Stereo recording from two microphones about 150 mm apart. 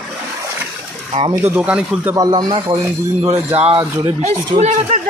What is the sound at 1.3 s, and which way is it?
Speech, 15° right (ahead or behind).